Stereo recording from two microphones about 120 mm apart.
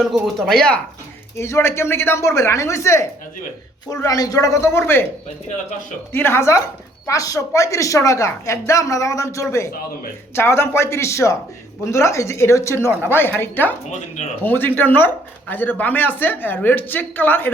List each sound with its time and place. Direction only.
0.0 s speech: centre (ahead or behind)
1.4 s speech: 20° left (ahead or behind)
6.1 s speech: 20° left (ahead or behind)